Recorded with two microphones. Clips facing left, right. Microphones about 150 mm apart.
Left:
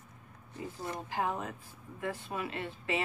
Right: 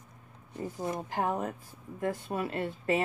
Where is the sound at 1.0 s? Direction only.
45° right (ahead or behind).